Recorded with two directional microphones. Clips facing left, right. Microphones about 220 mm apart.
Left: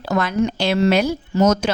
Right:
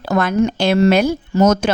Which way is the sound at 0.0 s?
50° right (ahead or behind).